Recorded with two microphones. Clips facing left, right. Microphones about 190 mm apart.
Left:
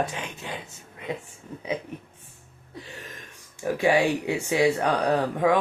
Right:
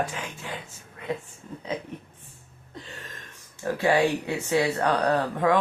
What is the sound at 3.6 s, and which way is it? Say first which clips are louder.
Speech: left 1 dB; 15° left (ahead or behind).